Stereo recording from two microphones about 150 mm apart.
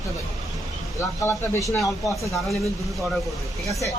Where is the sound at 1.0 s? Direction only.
20° left (ahead or behind).